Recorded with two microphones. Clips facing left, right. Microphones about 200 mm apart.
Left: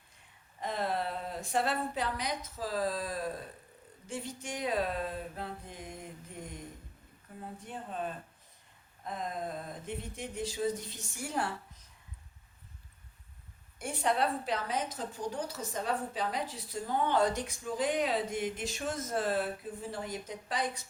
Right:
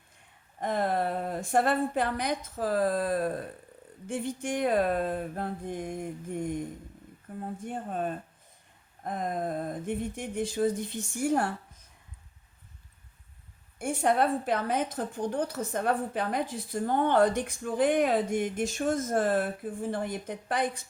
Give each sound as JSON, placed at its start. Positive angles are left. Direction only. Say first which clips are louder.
{"t": 0.6, "sound": "a woman's voice", "louder": "right 6 dB", "side_deg": -55}
{"t": 13.7, "sound": "a woman's voice", "louder": "right 5 dB", "side_deg": -50}